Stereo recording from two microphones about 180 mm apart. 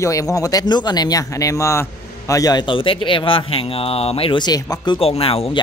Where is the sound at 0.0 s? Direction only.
20° left (ahead or behind).